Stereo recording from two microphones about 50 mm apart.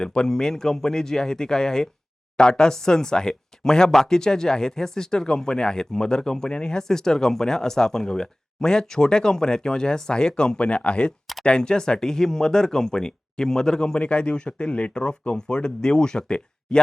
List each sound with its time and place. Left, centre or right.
0.0 s speech: centre